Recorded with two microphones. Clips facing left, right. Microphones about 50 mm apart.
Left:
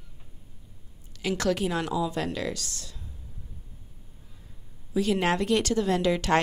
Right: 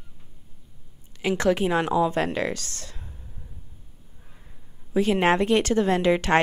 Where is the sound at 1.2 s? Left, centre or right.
Right.